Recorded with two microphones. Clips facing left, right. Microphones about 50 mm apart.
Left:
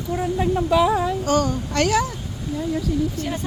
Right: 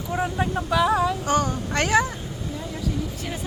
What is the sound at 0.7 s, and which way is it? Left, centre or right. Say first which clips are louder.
Speech: left 1 dB; centre.